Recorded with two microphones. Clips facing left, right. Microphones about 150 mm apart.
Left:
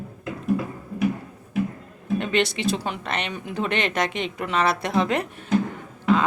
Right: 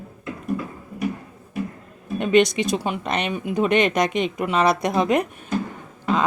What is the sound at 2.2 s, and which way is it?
Speech, 15° right (ahead or behind).